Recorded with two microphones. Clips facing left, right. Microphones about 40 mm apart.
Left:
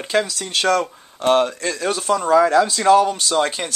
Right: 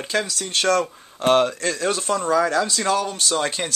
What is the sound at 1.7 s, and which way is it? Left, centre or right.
Speech, centre.